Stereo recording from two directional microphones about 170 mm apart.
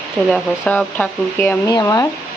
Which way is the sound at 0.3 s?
5° left (ahead or behind).